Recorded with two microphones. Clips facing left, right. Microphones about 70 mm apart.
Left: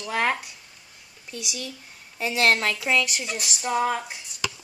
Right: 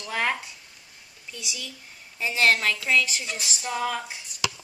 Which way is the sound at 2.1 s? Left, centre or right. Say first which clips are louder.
Left 1 dB; left.